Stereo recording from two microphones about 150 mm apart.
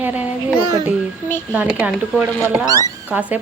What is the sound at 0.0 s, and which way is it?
Speech, 10° right (ahead or behind).